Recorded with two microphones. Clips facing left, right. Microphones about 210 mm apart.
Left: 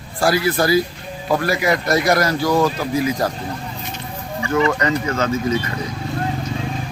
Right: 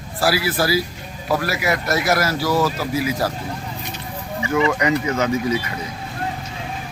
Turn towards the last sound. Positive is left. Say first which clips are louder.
# even
turn(degrees=-15)  # may be behind; listen again after turning